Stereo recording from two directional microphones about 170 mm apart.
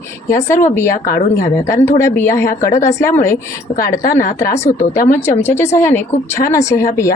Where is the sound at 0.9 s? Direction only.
55° left (ahead or behind).